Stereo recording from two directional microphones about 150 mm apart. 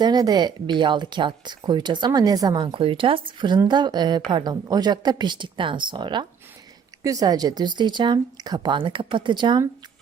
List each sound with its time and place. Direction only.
0.0 s speech: 25° right (ahead or behind)
2.7 s speech: 35° right (ahead or behind)